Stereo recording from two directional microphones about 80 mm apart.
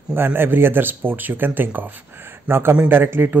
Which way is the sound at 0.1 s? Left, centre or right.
Right.